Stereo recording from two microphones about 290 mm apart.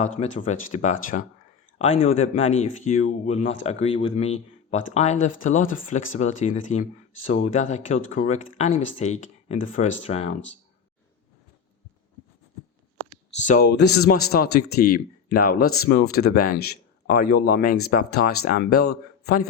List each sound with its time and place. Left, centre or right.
0.0 s speech: left
13.4 s speech: left